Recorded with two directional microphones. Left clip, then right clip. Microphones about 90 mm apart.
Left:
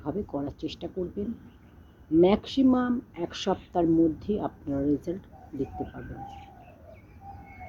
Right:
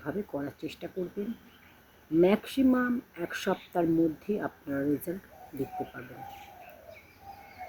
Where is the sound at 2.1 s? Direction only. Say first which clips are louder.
Left 3 dB; 25° right (ahead or behind).